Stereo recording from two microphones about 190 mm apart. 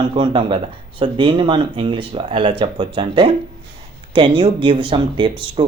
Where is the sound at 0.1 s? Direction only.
25° right (ahead or behind).